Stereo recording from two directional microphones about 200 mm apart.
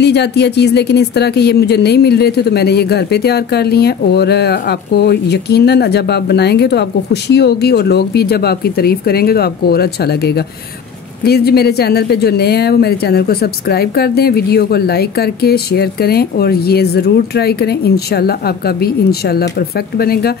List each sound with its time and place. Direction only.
0.0 s speech: 55° left (ahead or behind)